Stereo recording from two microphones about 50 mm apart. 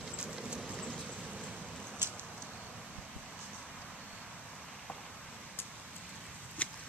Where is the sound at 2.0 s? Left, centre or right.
Right.